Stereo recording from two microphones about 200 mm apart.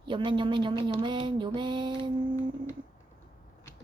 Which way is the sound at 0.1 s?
25° right (ahead or behind).